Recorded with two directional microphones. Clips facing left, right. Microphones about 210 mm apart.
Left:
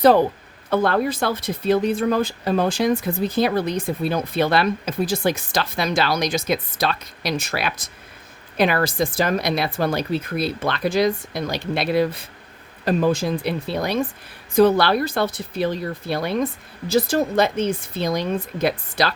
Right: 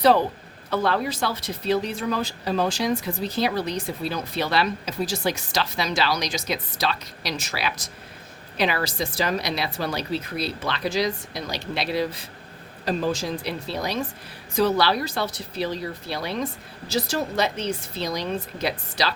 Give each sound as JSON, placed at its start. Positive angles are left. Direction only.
{"t": 0.7, "sound": "speech", "side_deg": 50}